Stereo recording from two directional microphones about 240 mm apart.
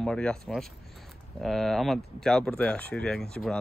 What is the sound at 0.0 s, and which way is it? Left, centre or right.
Speech, centre.